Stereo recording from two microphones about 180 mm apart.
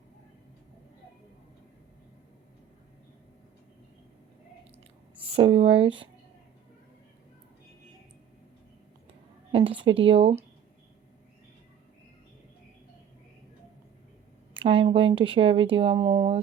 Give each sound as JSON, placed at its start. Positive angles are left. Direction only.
{"t": 5.2, "sound": "speech", "side_deg": -30}
{"t": 9.5, "sound": "speech", "side_deg": -30}
{"t": 14.5, "sound": "speech", "side_deg": -30}
{"t": 16.0, "sound": "speech", "side_deg": -20}